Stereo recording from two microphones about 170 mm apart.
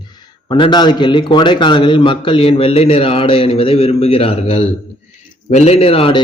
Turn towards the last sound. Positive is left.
turn(degrees=35)  # may be behind; listen again after turning